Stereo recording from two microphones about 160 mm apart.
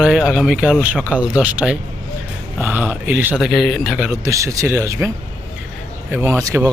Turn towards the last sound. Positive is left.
turn(degrees=-20)  # may be behind; listen again after turning